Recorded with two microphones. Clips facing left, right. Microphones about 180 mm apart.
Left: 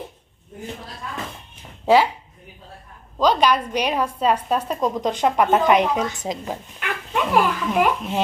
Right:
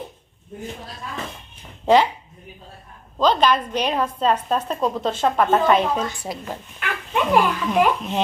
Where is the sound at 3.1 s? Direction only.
10° left (ahead or behind).